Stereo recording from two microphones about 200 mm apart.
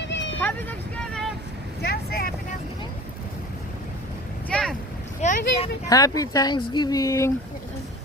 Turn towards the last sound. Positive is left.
turn(degrees=15)  # may be behind; listen again after turning